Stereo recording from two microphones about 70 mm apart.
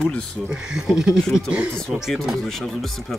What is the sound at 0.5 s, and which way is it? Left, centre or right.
Speech, centre.